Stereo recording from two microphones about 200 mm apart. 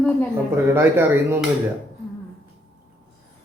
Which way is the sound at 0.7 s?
10° right (ahead or behind).